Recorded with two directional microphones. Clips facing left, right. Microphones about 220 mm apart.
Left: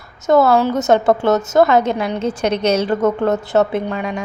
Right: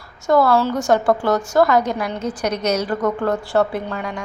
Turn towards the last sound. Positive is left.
turn(degrees=20)  # may be behind; listen again after turning